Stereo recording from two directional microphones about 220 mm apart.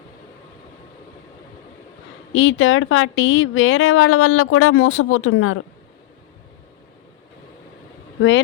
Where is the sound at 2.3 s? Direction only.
60° left (ahead or behind).